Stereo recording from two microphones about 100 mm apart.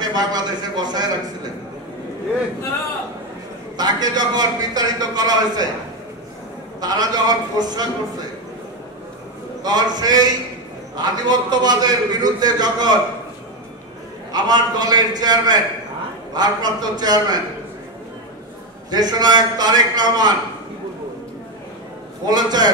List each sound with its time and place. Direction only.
0.0 s a man's voice: 40° right (ahead or behind)
3.7 s a man's voice: 40° right (ahead or behind)
6.8 s a man's voice: 40° right (ahead or behind)
9.6 s a man's voice: 45° right (ahead or behind)
14.3 s a man's voice: 45° right (ahead or behind)
18.9 s a man's voice: 45° right (ahead or behind)
22.2 s a man's voice: 45° right (ahead or behind)